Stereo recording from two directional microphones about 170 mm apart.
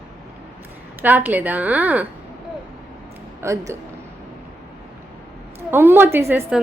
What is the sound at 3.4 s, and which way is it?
Speech, 15° right (ahead or behind).